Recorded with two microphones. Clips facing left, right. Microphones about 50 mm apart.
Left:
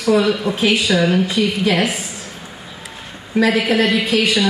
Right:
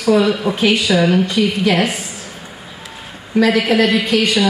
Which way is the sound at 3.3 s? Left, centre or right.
Centre.